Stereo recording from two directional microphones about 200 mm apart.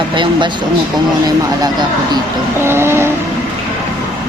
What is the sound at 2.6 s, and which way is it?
Vehicle, 10° right (ahead or behind).